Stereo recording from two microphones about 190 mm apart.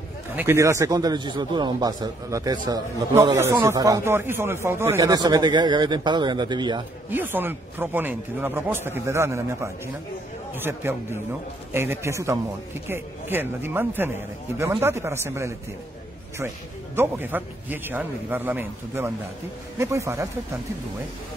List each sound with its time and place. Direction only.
0.4 s speech: 15° right (ahead or behind)
7.1 s a man's voice: 10° right (ahead or behind)
16.9 s a man's voice: 10° right (ahead or behind)